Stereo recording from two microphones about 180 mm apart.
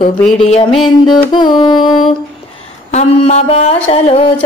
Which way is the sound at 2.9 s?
35° left (ahead or behind).